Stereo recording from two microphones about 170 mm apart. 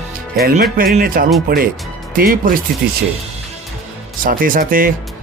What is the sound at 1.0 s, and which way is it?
Speech, 55° right (ahead or behind).